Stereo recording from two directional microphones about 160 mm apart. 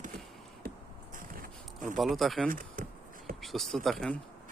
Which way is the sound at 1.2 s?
60° right (ahead or behind).